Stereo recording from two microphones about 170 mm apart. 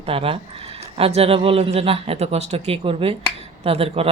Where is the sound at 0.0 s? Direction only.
35° right (ahead or behind).